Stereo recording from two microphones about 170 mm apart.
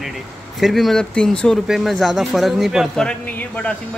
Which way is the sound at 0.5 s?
Centre (ahead or behind).